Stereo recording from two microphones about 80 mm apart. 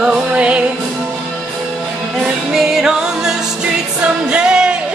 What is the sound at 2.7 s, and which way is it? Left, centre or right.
Music, centre.